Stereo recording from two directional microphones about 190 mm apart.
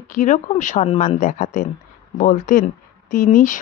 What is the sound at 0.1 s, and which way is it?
Speech, 40° left (ahead or behind).